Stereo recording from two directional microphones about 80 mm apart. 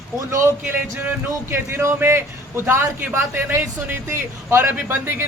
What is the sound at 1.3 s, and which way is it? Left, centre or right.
A man's voice, right.